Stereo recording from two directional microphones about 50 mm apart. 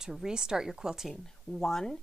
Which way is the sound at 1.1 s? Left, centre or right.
Centre.